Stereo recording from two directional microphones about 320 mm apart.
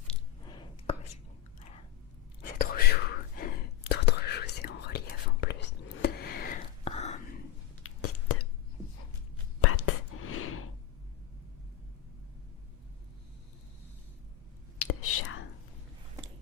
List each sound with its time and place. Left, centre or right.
0.1 s a sound: centre
2.6 s whispering: left
7.9 s whispering: left
9.6 s whispering: left
14.8 s whispering: left
16.2 s a sound: centre